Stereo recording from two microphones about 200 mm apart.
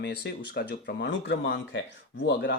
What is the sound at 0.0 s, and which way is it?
Speech, 55° left (ahead or behind).